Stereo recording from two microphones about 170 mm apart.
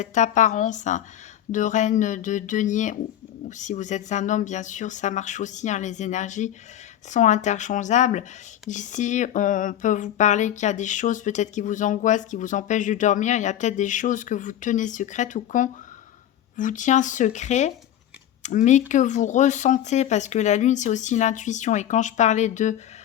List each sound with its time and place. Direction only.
0.0 s speech: 45° left (ahead or behind)